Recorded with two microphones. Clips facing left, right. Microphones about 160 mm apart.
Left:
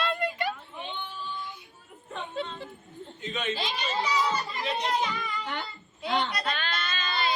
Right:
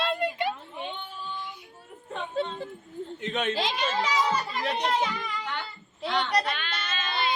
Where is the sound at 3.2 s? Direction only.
65° right (ahead or behind).